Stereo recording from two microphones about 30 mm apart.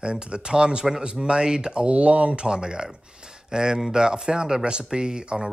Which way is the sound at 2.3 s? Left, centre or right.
Right.